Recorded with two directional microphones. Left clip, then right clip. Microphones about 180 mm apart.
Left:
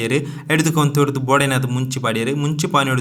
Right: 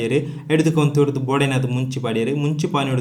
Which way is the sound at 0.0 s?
20° left (ahead or behind).